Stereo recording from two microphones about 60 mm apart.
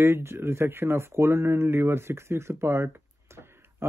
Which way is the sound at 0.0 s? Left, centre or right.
Right.